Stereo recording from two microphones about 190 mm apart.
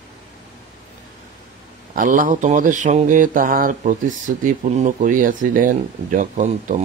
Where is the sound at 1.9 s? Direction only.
45° right (ahead or behind).